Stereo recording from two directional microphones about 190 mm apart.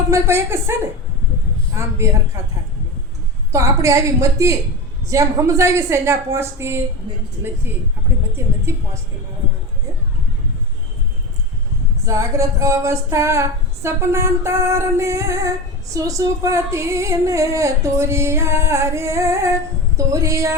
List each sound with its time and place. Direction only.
0.1 s female singing: 15° right (ahead or behind)
3.5 s female singing: 15° right (ahead or behind)
12.0 s female singing: 15° right (ahead or behind)